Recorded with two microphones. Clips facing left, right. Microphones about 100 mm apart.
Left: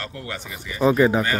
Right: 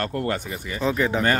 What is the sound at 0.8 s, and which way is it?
Speech, 15° left (ahead or behind).